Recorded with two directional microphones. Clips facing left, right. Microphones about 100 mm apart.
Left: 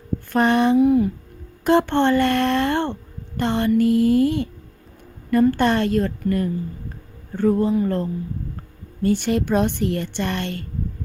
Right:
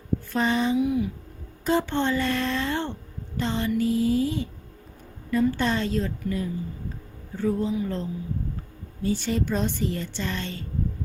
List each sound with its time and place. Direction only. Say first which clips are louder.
0.3 s speech: left 7 dB; 60° left (ahead or behind)
1.6 s speech: left 7 dB; 60° left (ahead or behind)